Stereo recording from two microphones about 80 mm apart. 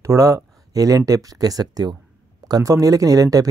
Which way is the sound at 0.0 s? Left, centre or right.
Right.